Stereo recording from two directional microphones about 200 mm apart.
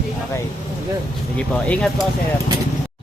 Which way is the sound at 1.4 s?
5° left (ahead or behind).